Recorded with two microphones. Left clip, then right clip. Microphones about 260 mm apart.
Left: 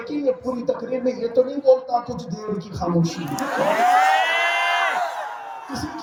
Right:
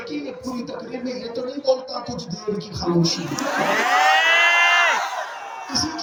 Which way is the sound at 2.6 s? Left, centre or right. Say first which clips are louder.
Right 2 dB; left.